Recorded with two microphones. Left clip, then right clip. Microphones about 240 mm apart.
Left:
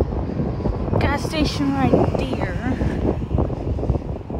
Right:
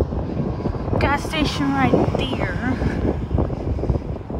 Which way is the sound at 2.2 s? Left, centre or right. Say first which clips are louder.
Right 1 dB; centre.